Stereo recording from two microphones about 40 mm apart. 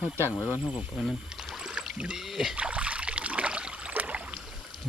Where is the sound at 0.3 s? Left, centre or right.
Left.